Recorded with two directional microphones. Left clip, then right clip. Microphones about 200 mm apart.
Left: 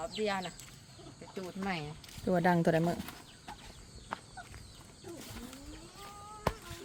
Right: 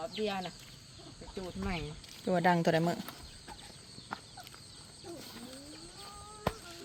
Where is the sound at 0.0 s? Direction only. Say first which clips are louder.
Left 1 dB; 10° right (ahead or behind).